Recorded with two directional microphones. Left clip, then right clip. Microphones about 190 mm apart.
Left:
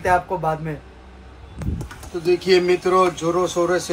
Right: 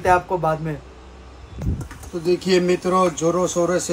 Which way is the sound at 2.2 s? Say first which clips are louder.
Left 2 dB; 15° right (ahead or behind).